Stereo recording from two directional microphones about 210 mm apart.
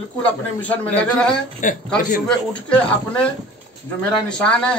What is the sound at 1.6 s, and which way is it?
Speech, 40° left (ahead or behind).